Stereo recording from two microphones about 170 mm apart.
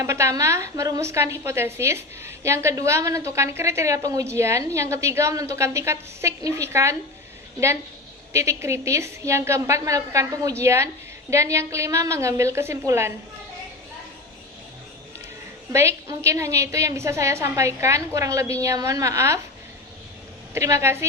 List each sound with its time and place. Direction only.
0.0 s a woman's voice: 15° right (ahead or behind)
8.3 s a woman's voice: 15° right (ahead or behind)
15.7 s a woman's voice: 15° right (ahead or behind)
20.5 s a woman's voice: 15° right (ahead or behind)